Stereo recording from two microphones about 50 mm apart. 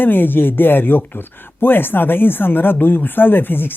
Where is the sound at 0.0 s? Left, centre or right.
Left.